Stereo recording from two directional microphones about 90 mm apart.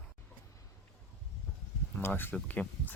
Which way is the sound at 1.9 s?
20° left (ahead or behind).